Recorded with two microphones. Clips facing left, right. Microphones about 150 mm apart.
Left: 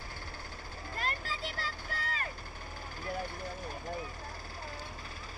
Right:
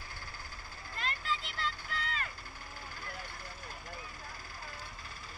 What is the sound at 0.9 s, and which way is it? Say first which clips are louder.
Vehicle: right 1 dB; 45° left (ahead or behind).